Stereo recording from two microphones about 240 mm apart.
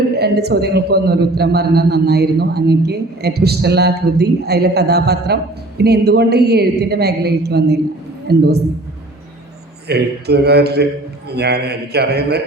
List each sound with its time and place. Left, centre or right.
0.2 s a man's voice: right
9.8 s a man's voice: right